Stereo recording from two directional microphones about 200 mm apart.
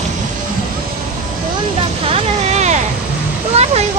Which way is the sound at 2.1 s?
35° right (ahead or behind).